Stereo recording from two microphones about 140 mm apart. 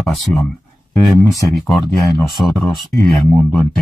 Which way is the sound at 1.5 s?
Centre (ahead or behind).